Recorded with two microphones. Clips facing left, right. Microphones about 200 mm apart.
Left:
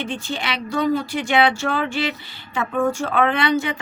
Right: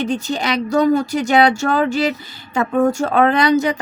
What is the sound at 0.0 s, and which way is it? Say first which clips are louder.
Speech: right 7 dB; 40° right (ahead or behind).